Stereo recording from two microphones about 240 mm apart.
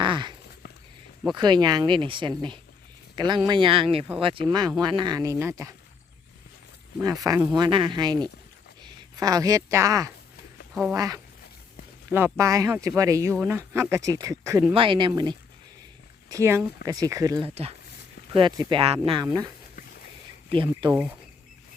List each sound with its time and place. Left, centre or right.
0.0 s dog: centre
1.4 s speech: centre
7.0 s speech: centre
20.5 s speech: right